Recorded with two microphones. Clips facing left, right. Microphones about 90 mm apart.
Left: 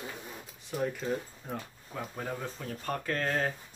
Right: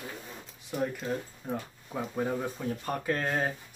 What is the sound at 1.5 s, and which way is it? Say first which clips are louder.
Speech: right 5 dB; 15° right (ahead or behind).